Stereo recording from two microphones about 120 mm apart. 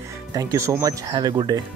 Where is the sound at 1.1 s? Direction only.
40° right (ahead or behind).